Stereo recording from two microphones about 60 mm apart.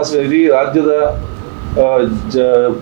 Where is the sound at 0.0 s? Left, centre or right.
Centre.